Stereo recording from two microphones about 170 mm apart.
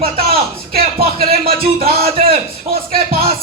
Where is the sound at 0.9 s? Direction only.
60° right (ahead or behind).